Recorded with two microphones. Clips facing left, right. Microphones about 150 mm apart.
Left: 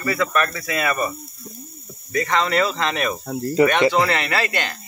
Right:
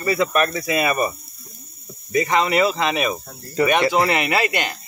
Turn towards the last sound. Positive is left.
turn(degrees=-15)  # may be behind; listen again after turning